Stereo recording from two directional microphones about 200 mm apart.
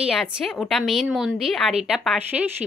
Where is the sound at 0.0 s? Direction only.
Centre (ahead or behind).